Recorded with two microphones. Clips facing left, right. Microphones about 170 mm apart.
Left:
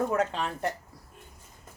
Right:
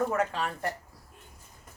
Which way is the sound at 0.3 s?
20° left (ahead or behind).